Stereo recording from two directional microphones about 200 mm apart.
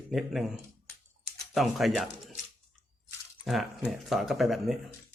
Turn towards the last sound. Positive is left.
turn(degrees=0)  # may be behind; listen again after turning